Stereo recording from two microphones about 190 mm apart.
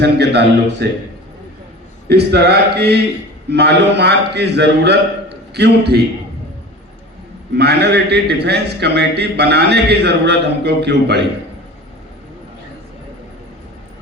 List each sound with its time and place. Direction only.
0.0 s a man's voice: 60° right (ahead or behind)
2.0 s a man's voice: 60° right (ahead or behind)
7.5 s a man's voice: 60° right (ahead or behind)